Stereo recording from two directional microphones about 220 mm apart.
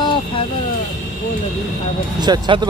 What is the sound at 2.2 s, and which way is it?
Speech, 20° right (ahead or behind).